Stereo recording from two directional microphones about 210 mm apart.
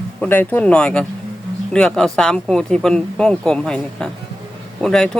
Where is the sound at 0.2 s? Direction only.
10° left (ahead or behind).